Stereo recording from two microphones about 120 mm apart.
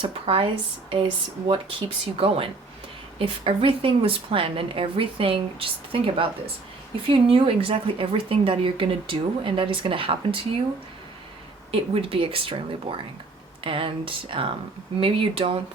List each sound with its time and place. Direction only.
0.0 s a woman's voice: 50° right (ahead or behind)
11.7 s a woman's voice: 50° right (ahead or behind)